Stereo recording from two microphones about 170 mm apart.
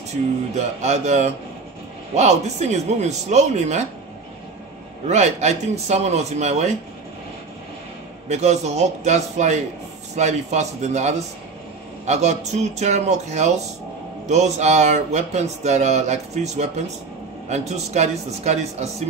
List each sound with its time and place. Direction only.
0.1 s speech: 40° right (ahead or behind)
5.0 s speech: 40° right (ahead or behind)
8.3 s speech: 40° right (ahead or behind)